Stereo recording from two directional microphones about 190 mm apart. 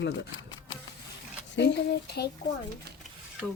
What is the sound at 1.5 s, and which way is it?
Speech, 65° left (ahead or behind).